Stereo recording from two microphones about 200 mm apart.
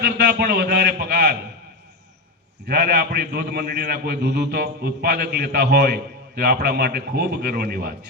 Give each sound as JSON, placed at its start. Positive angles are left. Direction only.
{"t": 0.0, "sound": "a man's voice", "side_deg": -55}
{"t": 2.6, "sound": "a man's voice", "side_deg": -50}